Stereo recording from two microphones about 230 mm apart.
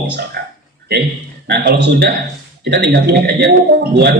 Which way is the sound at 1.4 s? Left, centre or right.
Right.